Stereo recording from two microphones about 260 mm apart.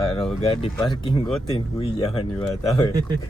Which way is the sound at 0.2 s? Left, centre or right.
Left.